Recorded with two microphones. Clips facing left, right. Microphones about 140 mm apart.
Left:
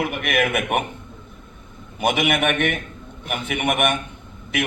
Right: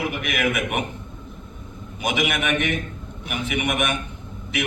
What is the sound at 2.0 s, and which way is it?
A man's voice, 55° left (ahead or behind).